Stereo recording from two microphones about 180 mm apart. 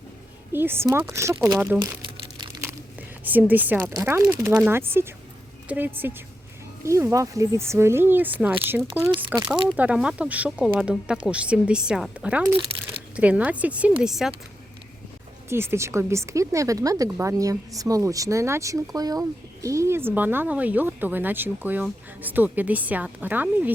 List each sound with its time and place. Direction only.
0.5 s speech: 10° right (ahead or behind)
2.0 s crumpling: 25° right (ahead or behind)
3.2 s speech: 10° right (ahead or behind)
15.4 s speech: 15° right (ahead or behind)